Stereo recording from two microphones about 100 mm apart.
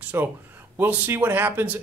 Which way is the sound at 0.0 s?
20° right (ahead or behind).